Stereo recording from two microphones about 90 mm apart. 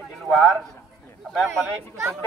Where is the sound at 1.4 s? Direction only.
35° right (ahead or behind).